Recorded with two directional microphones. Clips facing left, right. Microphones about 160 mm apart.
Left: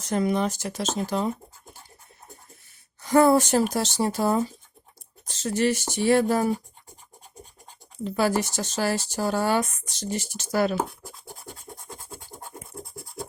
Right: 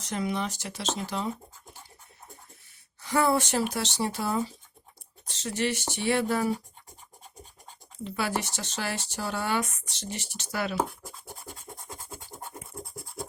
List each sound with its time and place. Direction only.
0.0 s speech: 45° left (ahead or behind)
3.0 s speech: 40° left (ahead or behind)
8.0 s speech: 40° left (ahead or behind)